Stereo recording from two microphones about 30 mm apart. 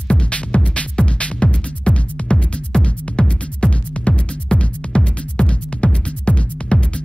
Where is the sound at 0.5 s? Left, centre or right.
Left.